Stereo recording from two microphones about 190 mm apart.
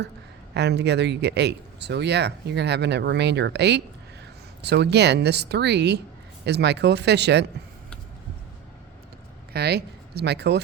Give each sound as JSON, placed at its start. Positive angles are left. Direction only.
{"t": 0.5, "sound": "speech", "side_deg": -60}
{"t": 9.5, "sound": "speech", "side_deg": -60}